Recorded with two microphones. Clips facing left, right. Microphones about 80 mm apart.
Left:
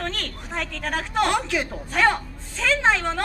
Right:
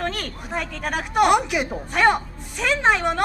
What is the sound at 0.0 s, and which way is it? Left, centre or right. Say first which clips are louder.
A woman's voice: right 3 dB; centre.